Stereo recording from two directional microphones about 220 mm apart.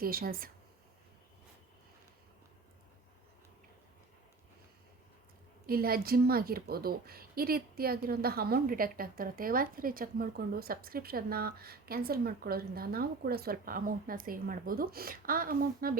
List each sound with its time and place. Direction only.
0.0 s a woman's voice: 40° right (ahead or behind)
5.6 s a woman's voice: 45° right (ahead or behind)